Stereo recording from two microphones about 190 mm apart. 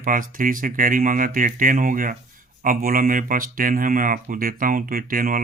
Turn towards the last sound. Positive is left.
turn(degrees=-50)  # may be behind; listen again after turning